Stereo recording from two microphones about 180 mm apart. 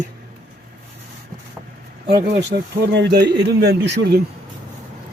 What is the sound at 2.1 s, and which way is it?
Speech, 60° right (ahead or behind).